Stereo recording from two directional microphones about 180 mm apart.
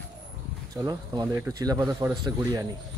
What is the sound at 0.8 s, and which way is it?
Speech, 20° right (ahead or behind).